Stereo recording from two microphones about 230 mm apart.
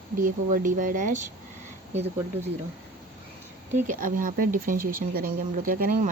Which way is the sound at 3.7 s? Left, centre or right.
Right.